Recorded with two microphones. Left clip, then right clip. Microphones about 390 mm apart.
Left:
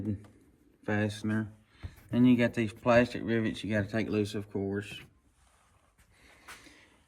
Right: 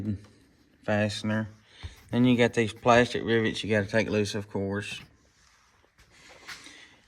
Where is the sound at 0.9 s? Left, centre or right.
Centre.